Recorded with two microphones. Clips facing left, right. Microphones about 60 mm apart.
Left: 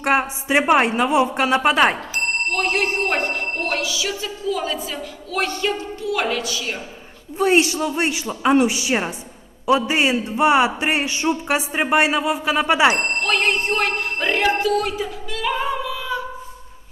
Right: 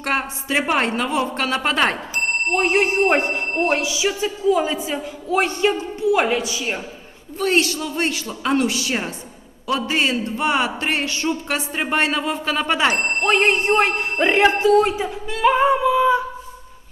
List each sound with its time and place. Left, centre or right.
0.0 s a man's voice: centre
2.5 s speech: right
7.3 s a man's voice: centre
13.1 s speech: right